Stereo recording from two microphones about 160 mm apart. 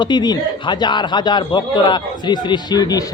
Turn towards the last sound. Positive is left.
turn(degrees=25)  # may be behind; listen again after turning